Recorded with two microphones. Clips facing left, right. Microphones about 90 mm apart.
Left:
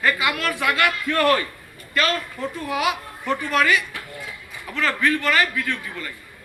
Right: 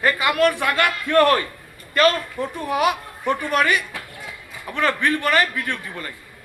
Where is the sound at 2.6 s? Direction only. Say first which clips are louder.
Right 3 dB; 45° right (ahead or behind).